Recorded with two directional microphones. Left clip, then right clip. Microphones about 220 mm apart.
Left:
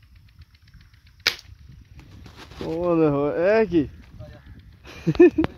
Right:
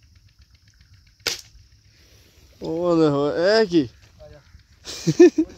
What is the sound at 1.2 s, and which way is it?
Cap gun, 15° right (ahead or behind).